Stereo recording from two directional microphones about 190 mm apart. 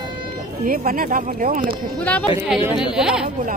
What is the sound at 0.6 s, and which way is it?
Speech, 50° right (ahead or behind).